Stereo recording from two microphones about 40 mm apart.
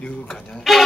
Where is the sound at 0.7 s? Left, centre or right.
Centre.